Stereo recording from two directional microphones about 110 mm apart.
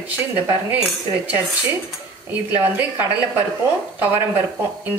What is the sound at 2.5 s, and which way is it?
Speech, 20° right (ahead or behind).